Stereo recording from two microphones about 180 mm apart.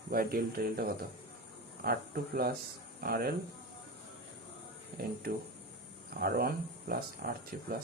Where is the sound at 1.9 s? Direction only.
55° right (ahead or behind).